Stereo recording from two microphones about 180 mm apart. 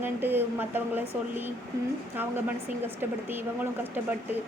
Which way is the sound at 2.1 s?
10° right (ahead or behind).